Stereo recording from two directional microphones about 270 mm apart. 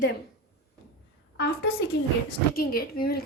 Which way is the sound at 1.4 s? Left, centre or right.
Left.